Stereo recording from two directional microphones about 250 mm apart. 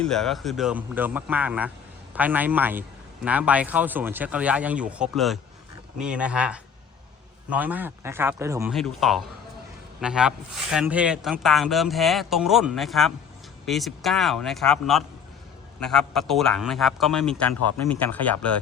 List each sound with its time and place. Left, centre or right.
0.0 s speech: centre
8.7 s speech: centre